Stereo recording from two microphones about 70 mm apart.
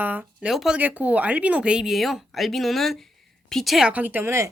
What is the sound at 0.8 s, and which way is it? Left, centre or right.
A woman's voice, right.